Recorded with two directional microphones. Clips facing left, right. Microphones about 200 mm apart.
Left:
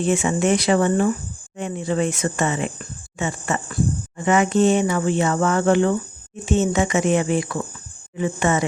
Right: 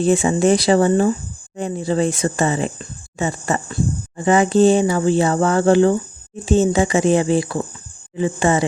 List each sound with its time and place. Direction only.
0.0 s speech: 35° right (ahead or behind)